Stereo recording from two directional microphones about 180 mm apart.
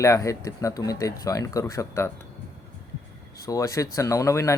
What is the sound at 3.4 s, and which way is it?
Speech, 20° left (ahead or behind).